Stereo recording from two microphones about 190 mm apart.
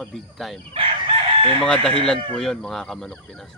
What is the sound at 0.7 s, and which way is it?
Chicken, 30° right (ahead or behind).